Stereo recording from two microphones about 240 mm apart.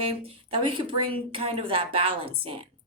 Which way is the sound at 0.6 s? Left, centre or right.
Right.